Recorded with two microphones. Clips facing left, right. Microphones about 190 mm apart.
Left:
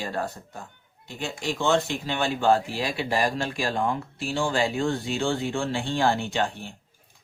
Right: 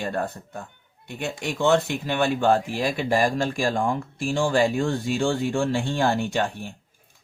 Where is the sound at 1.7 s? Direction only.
55° right (ahead or behind).